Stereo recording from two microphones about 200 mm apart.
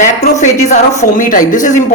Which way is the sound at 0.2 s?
35° left (ahead or behind).